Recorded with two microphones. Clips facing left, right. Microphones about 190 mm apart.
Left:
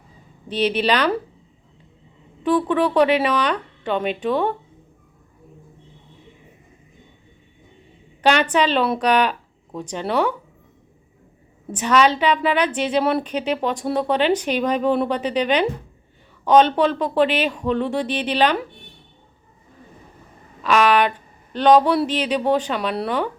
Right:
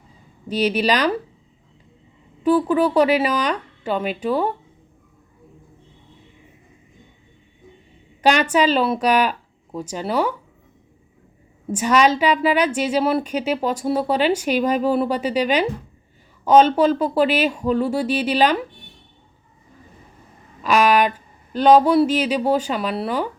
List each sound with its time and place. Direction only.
0.4 s speech: 10° right (ahead or behind)
2.4 s speech: 5° right (ahead or behind)
8.2 s speech: 10° right (ahead or behind)
11.7 s speech: 10° right (ahead or behind)
20.6 s speech: 10° right (ahead or behind)